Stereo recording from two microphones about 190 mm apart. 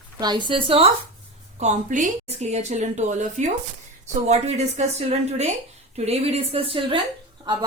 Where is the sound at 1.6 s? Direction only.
40° right (ahead or behind).